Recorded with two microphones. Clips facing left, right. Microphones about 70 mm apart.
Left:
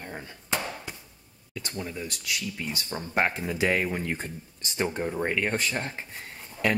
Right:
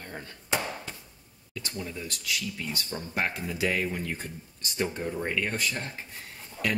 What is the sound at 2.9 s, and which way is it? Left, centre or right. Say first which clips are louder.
Speech: left 5 dB; left.